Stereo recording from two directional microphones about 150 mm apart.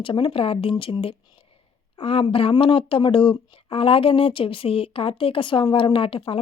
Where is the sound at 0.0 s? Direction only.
35° left (ahead or behind).